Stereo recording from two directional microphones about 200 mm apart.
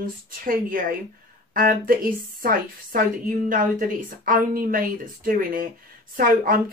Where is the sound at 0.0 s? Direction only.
45° right (ahead or behind).